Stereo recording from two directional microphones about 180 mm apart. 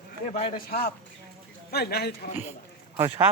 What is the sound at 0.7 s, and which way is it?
A man's voice, 60° left (ahead or behind).